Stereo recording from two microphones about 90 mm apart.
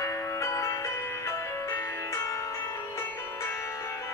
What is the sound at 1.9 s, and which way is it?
Music, 40° left (ahead or behind).